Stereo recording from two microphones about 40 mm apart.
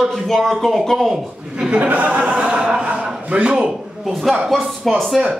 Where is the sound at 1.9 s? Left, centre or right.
Right.